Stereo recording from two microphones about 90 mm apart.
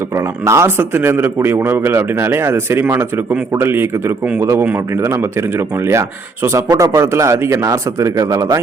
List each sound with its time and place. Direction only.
0.4 s a man's voice: 30° right (ahead or behind)
5.9 s speech: 30° right (ahead or behind)
6.7 s speech: 45° right (ahead or behind)
7.0 s speech: 30° right (ahead or behind)